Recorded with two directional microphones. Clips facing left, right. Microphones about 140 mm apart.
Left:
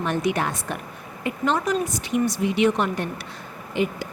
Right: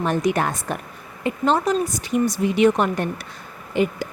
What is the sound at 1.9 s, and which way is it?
A woman's voice, 40° right (ahead or behind).